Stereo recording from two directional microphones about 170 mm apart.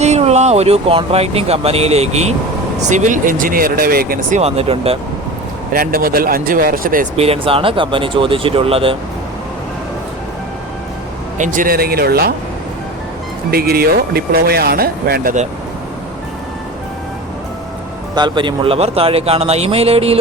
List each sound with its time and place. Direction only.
0.0 s speech: 40° right (ahead or behind); by 4.4 s 60° right (ahead or behind)
4.4 s a man's voice: 35° right (ahead or behind)
5.7 s speech: 60° right (ahead or behind)
7.2 s a man's voice: 35° right (ahead or behind)
11.3 s speech: 50° right (ahead or behind); by 12.3 s 65° right (ahead or behind)
13.5 s speech: 65° right (ahead or behind)
18.1 s a man's voice: 25° right (ahead or behind)